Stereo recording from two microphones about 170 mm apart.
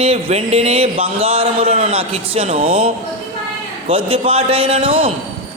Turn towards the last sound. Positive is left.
turn(degrees=-35)  # may be behind; listen again after turning